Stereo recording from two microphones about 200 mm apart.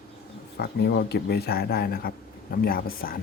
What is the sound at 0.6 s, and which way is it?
Speech, 55° left (ahead or behind).